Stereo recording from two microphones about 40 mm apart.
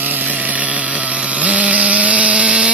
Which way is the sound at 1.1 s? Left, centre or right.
Right.